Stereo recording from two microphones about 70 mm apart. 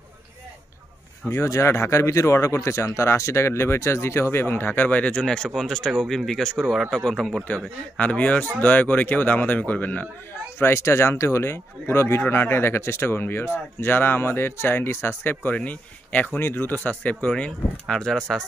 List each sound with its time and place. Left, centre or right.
1.3 s a man's voice: left; by 7.4 s centre
7.4 s speech: left
10.6 s speech: left
16.3 s speech: left; by 18.2 s centre